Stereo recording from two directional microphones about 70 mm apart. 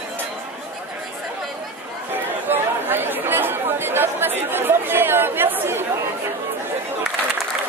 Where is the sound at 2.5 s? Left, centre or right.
Right.